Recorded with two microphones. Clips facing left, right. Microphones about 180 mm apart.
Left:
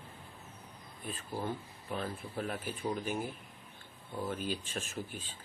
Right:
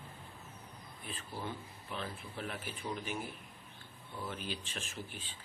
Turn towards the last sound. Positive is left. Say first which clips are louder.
# left 4 dB
turn(degrees=45)  # may be behind; listen again after turning